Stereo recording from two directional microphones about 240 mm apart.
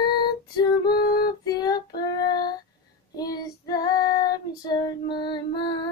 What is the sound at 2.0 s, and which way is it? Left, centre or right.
Child singing, centre.